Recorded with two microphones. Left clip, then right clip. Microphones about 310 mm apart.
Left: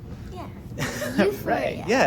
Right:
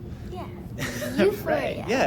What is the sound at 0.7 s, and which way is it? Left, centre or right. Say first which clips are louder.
Speech: left 1 dB; left.